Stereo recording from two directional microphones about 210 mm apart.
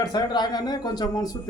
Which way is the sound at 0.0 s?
20° left (ahead or behind).